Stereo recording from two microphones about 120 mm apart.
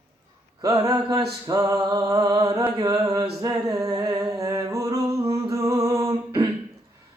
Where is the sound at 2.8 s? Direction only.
30° right (ahead or behind).